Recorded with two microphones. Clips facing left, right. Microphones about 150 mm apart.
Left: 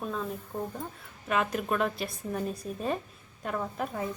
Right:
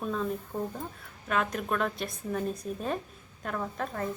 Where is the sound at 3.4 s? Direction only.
5° left (ahead or behind).